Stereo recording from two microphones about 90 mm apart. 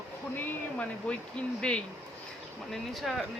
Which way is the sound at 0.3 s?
15° left (ahead or behind).